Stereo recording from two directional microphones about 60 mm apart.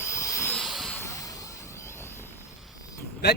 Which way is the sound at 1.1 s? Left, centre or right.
Left.